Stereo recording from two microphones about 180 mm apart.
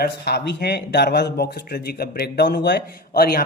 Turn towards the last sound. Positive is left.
turn(degrees=60)  # may be behind; listen again after turning